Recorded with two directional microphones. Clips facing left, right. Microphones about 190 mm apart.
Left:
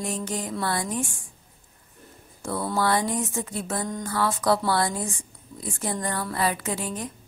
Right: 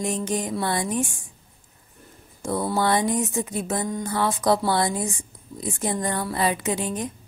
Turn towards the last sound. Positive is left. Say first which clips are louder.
# right 4 dB
turn(degrees=-20)  # may be behind; listen again after turning